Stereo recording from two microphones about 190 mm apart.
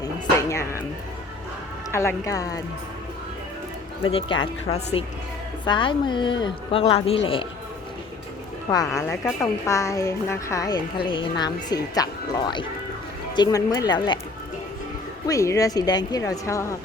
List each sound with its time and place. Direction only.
0.0 s music: 15° left (ahead or behind)
1.9 s speech: 15° left (ahead or behind)
4.0 s a woman's voice: 25° left (ahead or behind)
9.0 s a woman's voice: 15° left (ahead or behind)
15.3 s speech: 15° left (ahead or behind)